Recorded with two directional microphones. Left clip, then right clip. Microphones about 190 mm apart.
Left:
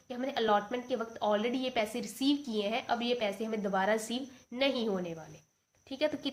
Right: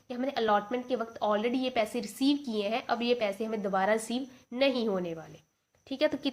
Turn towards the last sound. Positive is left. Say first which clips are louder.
# right 4 dB
turn(degrees=-40)  # may be behind; listen again after turning